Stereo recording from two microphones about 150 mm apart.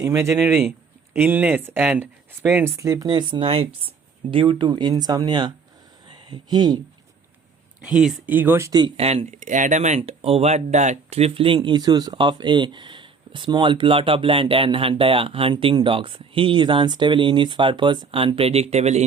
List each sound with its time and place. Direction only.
0.0 s speech: 20° right (ahead or behind)
7.9 s speech: 5° right (ahead or behind); by 8.9 s 25° right (ahead or behind)
9.0 s speech: 45° right (ahead or behind)
10.0 s speech: 40° right (ahead or behind)